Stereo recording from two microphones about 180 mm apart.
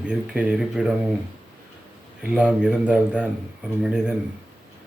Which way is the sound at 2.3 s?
5° right (ahead or behind).